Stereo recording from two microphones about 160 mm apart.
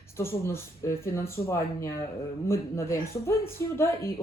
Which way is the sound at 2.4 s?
15° left (ahead or behind).